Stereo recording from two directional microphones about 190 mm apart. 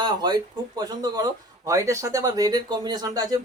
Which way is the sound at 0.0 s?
25° right (ahead or behind).